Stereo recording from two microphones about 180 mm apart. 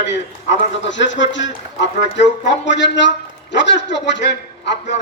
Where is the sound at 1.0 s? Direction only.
90° left.